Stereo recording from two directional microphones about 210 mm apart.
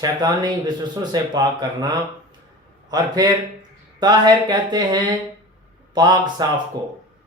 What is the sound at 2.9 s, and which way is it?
Speech, 20° right (ahead or behind).